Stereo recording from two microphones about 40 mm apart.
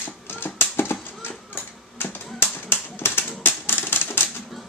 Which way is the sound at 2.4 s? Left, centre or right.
Left.